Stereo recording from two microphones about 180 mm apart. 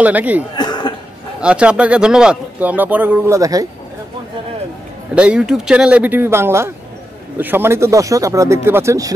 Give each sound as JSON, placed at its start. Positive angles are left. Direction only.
{"t": 0.0, "sound": "speech", "side_deg": -10}
{"t": 0.6, "sound": "a sound", "side_deg": 25}
{"t": 1.4, "sound": "speech", "side_deg": -5}
{"t": 5.1, "sound": "speech", "side_deg": -5}